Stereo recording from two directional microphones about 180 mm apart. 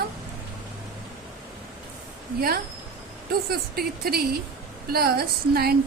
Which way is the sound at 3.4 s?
60° right (ahead or behind).